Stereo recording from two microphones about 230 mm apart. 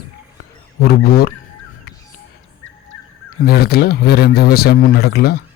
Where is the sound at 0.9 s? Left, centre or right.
Left.